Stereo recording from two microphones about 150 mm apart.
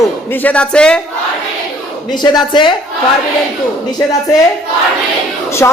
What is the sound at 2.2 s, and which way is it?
Speech, 30° left (ahead or behind).